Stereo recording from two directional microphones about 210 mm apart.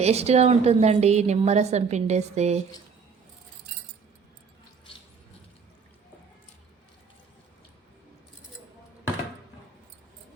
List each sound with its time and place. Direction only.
0.0 s a woman's voice: 30° right (ahead or behind)